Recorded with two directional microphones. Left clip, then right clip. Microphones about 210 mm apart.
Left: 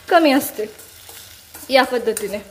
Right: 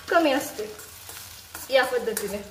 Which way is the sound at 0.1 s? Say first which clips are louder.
Left 7 dB; 40° left (ahead or behind).